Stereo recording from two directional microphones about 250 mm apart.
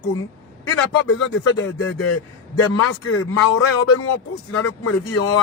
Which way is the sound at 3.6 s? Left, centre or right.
Left.